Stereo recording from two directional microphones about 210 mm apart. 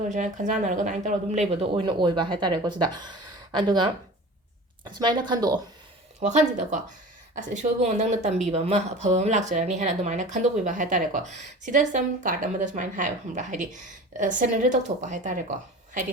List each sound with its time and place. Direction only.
0.1 s speech: 35° right (ahead or behind); by 5.5 s 20° right (ahead or behind)
6.1 s speech: 35° right (ahead or behind)